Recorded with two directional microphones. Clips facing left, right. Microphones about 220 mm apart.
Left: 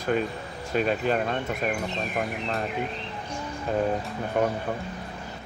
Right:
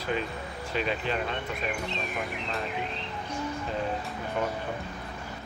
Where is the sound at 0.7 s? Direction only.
45° left (ahead or behind).